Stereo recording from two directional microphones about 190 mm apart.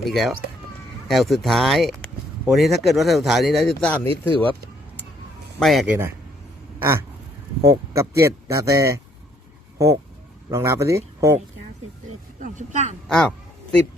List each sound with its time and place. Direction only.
0.0 s speech: centre (ahead or behind)
5.5 s speech: centre (ahead or behind)
7.6 s speech: 15° right (ahead or behind)
12.4 s speech: 40° right (ahead or behind)
13.1 s a sound: 5° left (ahead or behind)